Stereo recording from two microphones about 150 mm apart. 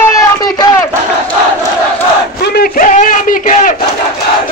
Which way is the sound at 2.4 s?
85° left.